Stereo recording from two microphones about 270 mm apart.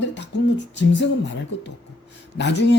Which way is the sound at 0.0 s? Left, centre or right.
Left.